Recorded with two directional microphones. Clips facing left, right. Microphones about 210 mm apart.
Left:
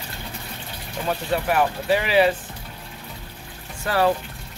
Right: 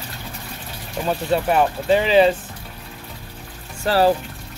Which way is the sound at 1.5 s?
25° right (ahead or behind).